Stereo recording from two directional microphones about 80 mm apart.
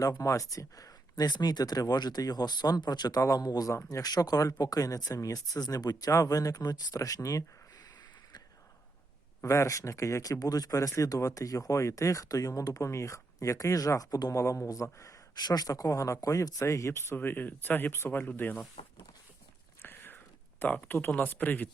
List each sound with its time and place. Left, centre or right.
0.0 s speech: left
3.2 s speech: left
6.1 s speech: left
9.4 s speech: left
17.2 s speech: left
19.8 s a sound: left
20.6 s speech: centre